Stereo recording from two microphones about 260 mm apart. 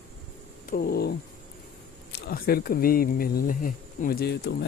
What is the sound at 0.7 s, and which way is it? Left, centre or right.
Speech, left.